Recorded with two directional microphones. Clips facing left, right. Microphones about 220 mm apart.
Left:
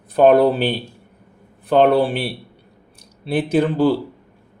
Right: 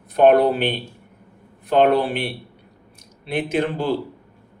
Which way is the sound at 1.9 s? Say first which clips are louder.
Left 3 dB; 30° left (ahead or behind).